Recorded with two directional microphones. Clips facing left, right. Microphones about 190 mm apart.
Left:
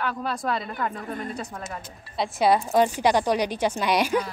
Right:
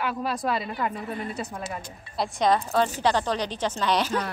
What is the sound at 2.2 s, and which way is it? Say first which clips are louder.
Speech: left 2 dB; 10° left (ahead or behind).